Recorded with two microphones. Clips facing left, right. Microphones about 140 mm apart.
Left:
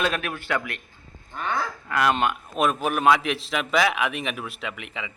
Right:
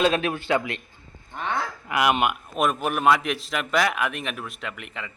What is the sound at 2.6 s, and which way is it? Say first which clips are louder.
A man's voice: left 1 dB; centre (ahead or behind).